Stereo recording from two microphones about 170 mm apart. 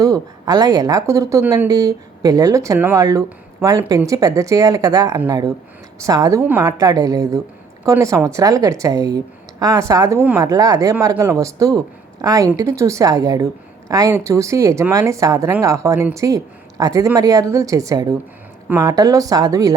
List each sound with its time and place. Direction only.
0.0 s speech: 20° right (ahead or behind)